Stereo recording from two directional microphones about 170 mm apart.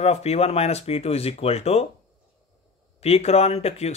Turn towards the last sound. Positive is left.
turn(degrees=40)  # may be behind; listen again after turning